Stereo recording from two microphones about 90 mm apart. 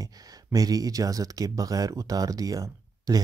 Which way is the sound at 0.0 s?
40° right (ahead or behind).